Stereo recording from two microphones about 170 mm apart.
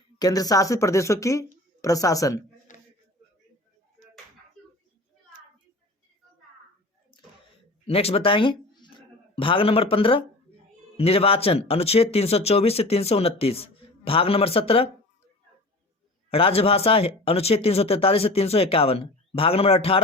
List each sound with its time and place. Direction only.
0.2 s speech: 20° left (ahead or behind)
2.7 s a sound: 50° left (ahead or behind)
7.9 s speech: 35° left (ahead or behind)
16.3 s speech: 35° left (ahead or behind)